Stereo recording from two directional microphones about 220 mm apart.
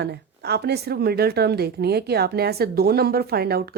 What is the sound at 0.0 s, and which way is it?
A woman's voice, 50° right (ahead or behind).